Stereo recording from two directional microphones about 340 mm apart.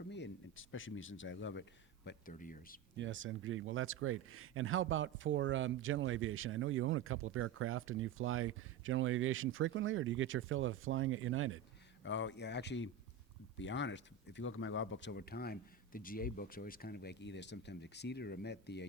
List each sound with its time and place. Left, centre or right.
0.0 s speech: left
3.0 s speech: right
12.0 s speech: left